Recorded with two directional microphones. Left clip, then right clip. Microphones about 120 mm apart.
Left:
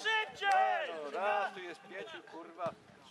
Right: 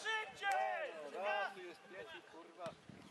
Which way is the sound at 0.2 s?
30° left (ahead or behind).